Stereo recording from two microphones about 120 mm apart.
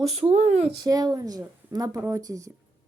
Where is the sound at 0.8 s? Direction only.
30° right (ahead or behind).